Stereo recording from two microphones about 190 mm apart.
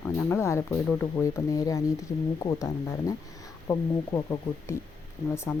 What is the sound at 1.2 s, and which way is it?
Speech, 15° left (ahead or behind).